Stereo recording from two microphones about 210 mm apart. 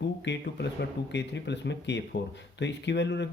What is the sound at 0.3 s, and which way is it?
Speech, 55° left (ahead or behind).